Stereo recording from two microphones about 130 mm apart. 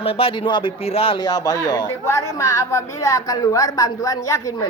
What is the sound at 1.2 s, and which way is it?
A woman's voice, 30° left (ahead or behind).